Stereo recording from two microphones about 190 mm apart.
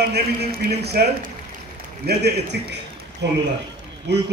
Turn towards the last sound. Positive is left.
turn(degrees=-60)  # may be behind; listen again after turning